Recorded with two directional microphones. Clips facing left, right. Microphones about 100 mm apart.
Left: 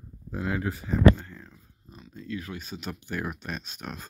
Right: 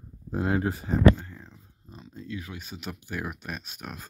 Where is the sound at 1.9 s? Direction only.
30° right (ahead or behind).